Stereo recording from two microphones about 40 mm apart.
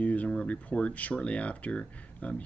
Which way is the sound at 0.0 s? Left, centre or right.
Left.